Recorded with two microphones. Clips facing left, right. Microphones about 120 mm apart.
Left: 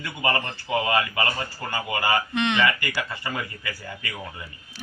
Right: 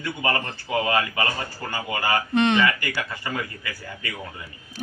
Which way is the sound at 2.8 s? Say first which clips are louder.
Even; 15° left (ahead or behind).